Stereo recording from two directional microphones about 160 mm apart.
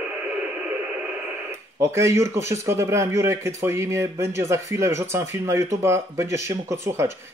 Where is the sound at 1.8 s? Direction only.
15° right (ahead or behind).